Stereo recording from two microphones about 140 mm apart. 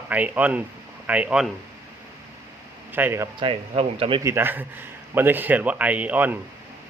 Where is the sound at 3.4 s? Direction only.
40° right (ahead or behind).